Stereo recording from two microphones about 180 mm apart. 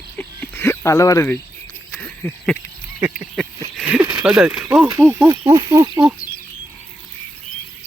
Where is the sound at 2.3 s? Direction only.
5° left (ahead or behind).